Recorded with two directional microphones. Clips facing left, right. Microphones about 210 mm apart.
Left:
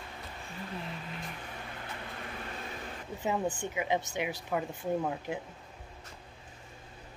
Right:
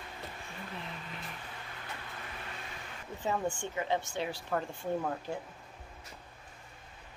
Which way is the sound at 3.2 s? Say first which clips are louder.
Left 1 dB; 15° left (ahead or behind).